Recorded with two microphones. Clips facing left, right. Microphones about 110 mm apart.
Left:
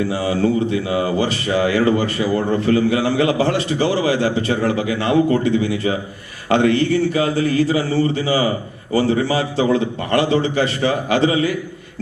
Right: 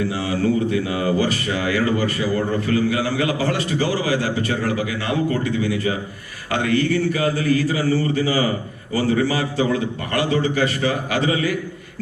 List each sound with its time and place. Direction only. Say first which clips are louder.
0.1 s speech: left 3 dB; 25° left (ahead or behind)